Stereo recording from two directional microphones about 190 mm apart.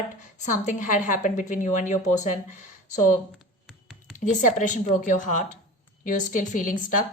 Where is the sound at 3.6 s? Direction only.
5° right (ahead or behind).